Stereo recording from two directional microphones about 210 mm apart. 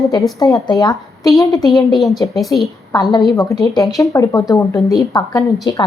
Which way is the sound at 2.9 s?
20° left (ahead or behind).